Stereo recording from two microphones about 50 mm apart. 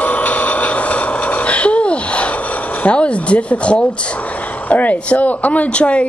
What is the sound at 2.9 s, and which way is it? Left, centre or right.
A woman's voice, left.